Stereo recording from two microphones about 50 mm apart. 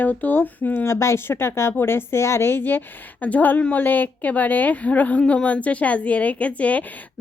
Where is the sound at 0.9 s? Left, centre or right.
Left.